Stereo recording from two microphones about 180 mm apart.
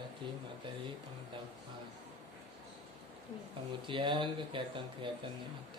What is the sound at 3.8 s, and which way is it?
Speech, 25° right (ahead or behind).